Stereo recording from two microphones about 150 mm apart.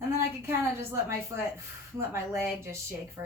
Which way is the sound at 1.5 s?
15° right (ahead or behind).